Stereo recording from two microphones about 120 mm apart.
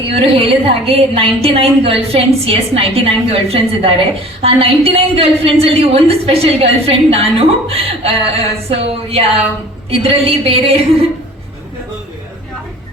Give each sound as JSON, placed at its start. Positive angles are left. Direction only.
{"t": 0.1, "sound": "a woman's voice", "side_deg": -55}